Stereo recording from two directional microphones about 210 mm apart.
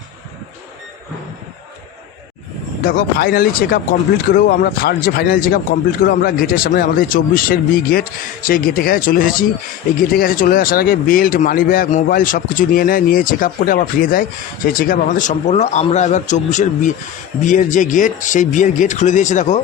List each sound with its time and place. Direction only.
2.8 s speech: 45° left (ahead or behind)